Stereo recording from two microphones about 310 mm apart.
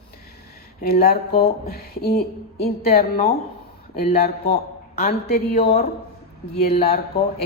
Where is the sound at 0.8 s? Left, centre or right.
Left.